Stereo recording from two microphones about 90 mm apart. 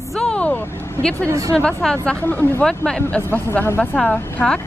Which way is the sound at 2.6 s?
10° left (ahead or behind).